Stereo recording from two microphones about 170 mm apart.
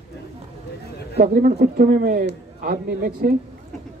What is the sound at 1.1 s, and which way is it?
Speech, 55° right (ahead or behind).